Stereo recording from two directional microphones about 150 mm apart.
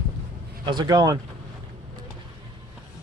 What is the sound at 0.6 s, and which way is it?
Speech, 30° right (ahead or behind).